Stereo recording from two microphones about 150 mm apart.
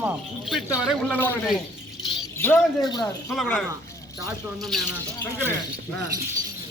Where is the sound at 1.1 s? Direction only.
15° left (ahead or behind).